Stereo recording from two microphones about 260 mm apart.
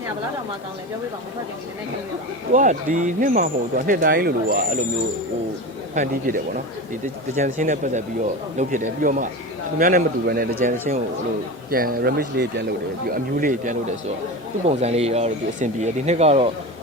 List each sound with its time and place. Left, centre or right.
2.5 s speech: right
5.9 s speech: right